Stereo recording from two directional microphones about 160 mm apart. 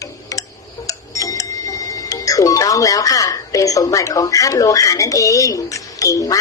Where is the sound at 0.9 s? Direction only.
20° left (ahead or behind).